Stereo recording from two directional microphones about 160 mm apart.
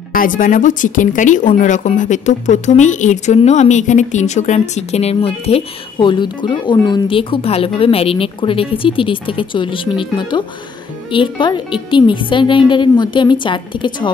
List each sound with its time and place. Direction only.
0.1 s a woman's voice: 60° left (ahead or behind); by 14.1 s 30° left (ahead or behind)